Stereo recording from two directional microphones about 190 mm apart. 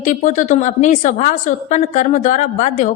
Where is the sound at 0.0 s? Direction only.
40° left (ahead or behind).